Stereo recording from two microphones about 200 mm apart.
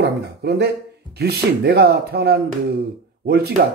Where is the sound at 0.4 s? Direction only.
55° right (ahead or behind).